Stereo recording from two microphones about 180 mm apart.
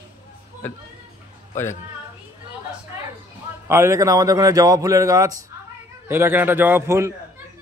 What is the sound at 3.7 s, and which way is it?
A man's voice, 15° right (ahead or behind).